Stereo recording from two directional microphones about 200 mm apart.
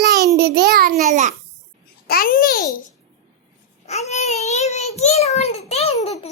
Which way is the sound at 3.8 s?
35° left (ahead or behind).